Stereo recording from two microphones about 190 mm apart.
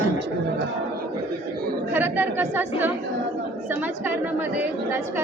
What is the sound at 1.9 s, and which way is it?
Speech, 10° right (ahead or behind).